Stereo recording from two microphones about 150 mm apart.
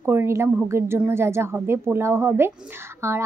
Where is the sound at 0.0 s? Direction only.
15° right (ahead or behind).